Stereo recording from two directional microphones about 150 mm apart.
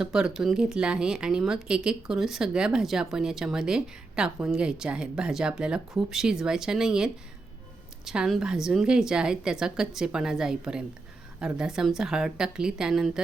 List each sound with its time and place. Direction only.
0.0 s speech: 5° right (ahead or behind)